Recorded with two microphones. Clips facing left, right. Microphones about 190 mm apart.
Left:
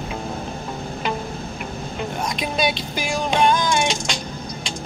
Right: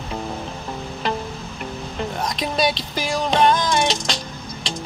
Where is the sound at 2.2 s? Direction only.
Centre (ahead or behind).